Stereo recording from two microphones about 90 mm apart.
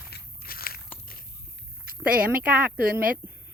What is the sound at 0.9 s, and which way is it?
Biting, 20° left (ahead or behind).